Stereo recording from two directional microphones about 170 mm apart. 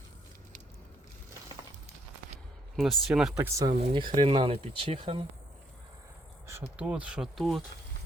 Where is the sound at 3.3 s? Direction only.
15° right (ahead or behind).